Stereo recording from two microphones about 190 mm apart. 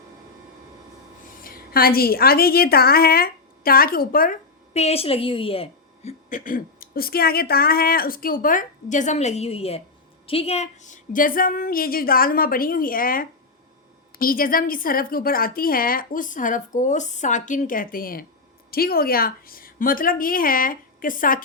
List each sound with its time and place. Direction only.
1.5 s a woman's voice: 50° left (ahead or behind); by 5.6 s 30° left (ahead or behind)
6.1 s a woman's voice: 45° left (ahead or behind)